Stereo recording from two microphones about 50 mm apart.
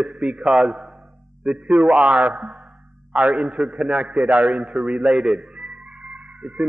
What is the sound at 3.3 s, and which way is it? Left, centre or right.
A man's voice, centre.